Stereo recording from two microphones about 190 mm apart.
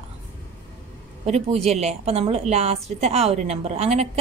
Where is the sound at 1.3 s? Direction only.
35° right (ahead or behind).